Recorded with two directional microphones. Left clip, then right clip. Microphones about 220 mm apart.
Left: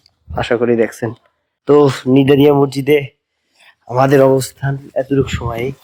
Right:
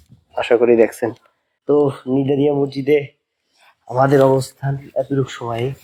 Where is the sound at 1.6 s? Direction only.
45° left (ahead or behind).